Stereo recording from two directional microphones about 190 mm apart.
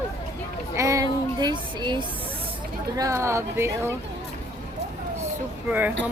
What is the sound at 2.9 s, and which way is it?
Speech, 15° right (ahead or behind).